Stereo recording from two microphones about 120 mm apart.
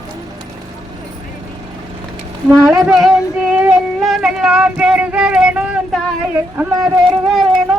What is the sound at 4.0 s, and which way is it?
Speech, centre (ahead or behind).